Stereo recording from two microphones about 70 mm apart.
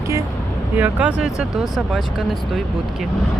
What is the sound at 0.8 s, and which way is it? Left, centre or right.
Speech, right.